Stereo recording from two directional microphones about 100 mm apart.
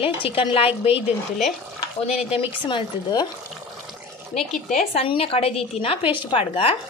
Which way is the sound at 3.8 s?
5° left (ahead or behind).